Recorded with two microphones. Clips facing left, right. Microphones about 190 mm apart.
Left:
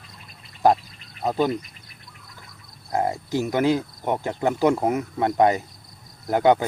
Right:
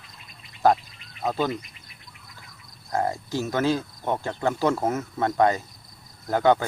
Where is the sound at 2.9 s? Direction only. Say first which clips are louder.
Left 2 dB; 20° left (ahead or behind).